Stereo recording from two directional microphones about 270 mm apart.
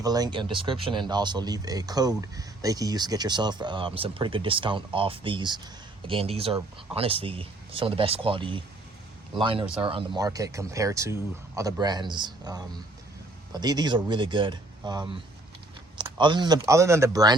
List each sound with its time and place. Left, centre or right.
0.0 s speech: centre